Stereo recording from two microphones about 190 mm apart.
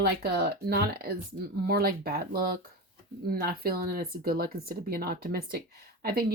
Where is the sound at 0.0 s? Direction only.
55° right (ahead or behind).